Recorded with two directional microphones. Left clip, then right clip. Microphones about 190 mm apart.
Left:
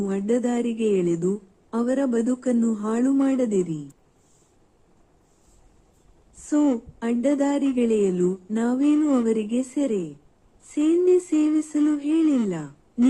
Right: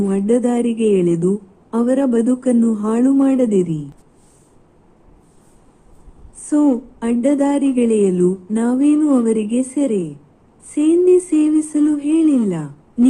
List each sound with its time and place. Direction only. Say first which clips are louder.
0.0 s a woman's voice: right 7 dB; 15° left (ahead or behind)
6.5 s a woman's voice: right 6 dB; 15° left (ahead or behind)
9.0 s a woman's voice: right 6 dB; 35° left (ahead or behind)
9.2 s a woman's voice: right 6 dB; 15° left (ahead or behind)